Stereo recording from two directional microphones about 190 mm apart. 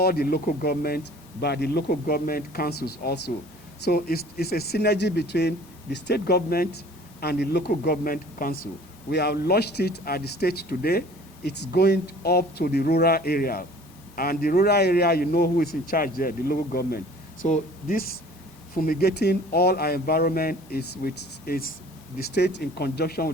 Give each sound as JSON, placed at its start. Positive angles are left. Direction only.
{"t": 0.0, "sound": "speech", "side_deg": 55}